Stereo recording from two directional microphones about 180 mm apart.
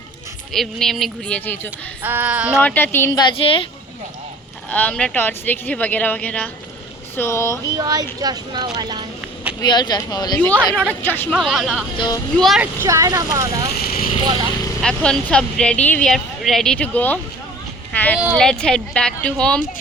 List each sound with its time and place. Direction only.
0.5 s speech: centre (ahead or behind)
2.0 s a sound: 10° right (ahead or behind)
2.6 s speech: 10° left (ahead or behind)
3.2 s speech: 30° left (ahead or behind)
4.7 s speech: 5° left (ahead or behind)
7.6 s speech: 20° right (ahead or behind)
9.6 s speech: 25° left (ahead or behind)
11.0 s speech: 10° left (ahead or behind)
11.3 s speech: centre (ahead or behind)
11.9 s speech: 25° left (ahead or behind)
12.4 s speech: centre (ahead or behind)
12.8 s speech: 15° right (ahead or behind)
13.7 s vehicle: 55° left (ahead or behind)
14.8 s speech: 5° left (ahead or behind)